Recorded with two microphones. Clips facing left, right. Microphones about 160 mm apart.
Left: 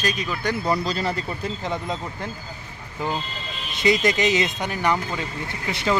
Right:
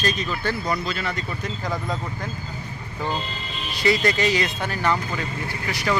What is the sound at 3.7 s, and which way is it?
A man's voice, 20° left (ahead or behind).